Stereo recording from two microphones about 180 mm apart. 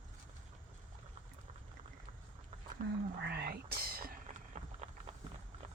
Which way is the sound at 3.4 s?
60° right (ahead or behind).